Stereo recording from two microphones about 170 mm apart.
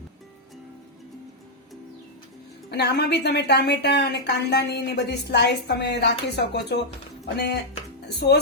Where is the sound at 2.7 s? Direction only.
80° left.